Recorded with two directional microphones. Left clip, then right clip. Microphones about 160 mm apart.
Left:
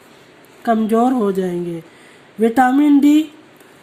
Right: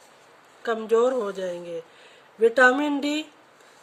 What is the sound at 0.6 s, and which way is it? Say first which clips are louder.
Speech: left 6 dB; 30° left (ahead or behind).